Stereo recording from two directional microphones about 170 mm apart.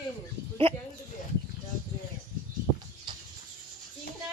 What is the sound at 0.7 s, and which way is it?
Snicker, 35° right (ahead or behind).